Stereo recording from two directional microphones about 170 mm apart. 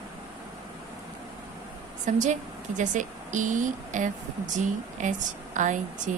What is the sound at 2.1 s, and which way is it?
A woman's voice, 50° right (ahead or behind).